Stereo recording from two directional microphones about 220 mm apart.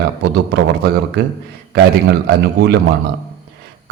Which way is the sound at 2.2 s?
50° right (ahead or behind).